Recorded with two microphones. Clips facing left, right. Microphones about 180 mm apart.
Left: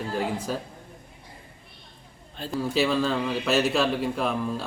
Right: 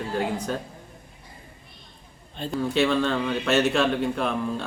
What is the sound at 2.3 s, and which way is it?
A man's voice, 5° left (ahead or behind).